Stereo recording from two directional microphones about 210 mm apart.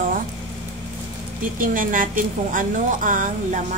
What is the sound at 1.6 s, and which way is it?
A woman's voice, 40° right (ahead or behind).